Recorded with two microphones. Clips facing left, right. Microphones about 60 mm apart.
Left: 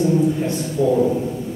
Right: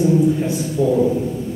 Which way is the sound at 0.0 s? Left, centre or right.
Centre.